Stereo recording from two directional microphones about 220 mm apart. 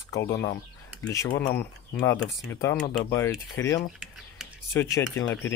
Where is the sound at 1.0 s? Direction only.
15° left (ahead or behind).